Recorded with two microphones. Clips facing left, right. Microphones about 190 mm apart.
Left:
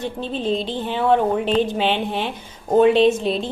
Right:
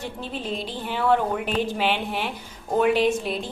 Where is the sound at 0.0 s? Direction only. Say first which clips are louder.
Left 7 dB; 25° left (ahead or behind).